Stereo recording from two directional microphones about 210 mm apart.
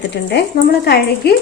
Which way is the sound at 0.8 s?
50° left (ahead or behind).